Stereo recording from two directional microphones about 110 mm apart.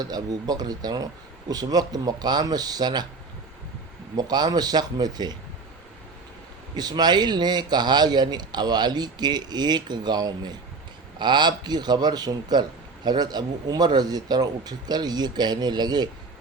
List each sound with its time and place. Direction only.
0.0 s speech: 35° right (ahead or behind)
4.2 s speech: 40° right (ahead or behind)
6.7 s speech: 40° right (ahead or behind)